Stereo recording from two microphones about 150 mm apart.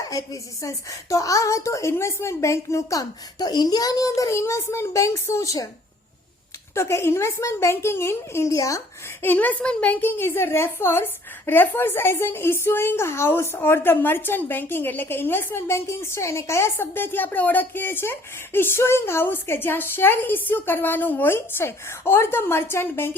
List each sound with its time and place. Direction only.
0.1 s a woman's voice: 25° left (ahead or behind)
6.7 s a woman's voice: 20° left (ahead or behind)